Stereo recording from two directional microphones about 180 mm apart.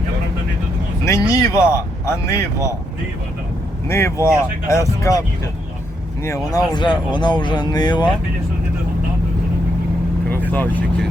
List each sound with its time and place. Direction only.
1.0 s speech: 15° left (ahead or behind)
3.8 s speech: 15° left (ahead or behind)
6.2 s speech: 20° left (ahead or behind)
10.2 s speech: 10° left (ahead or behind)